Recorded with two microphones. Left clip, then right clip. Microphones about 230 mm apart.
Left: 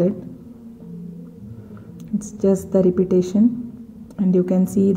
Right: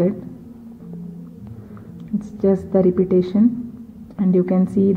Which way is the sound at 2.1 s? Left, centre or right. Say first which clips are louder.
Even; centre.